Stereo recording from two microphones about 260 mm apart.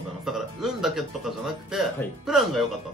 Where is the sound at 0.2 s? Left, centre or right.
Centre.